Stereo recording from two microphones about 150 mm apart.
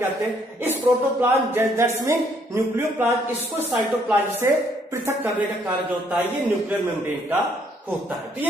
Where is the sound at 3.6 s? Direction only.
15° right (ahead or behind).